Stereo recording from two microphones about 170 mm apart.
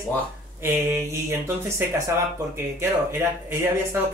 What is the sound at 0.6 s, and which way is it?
Speech, 15° right (ahead or behind).